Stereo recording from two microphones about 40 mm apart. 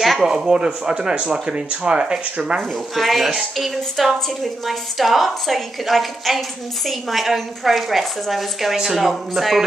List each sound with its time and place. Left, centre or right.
0.2 s speech: centre
3.0 s a woman's voice: centre